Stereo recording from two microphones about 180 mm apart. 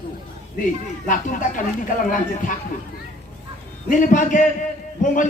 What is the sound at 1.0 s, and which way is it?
Speech, 45° left (ahead or behind).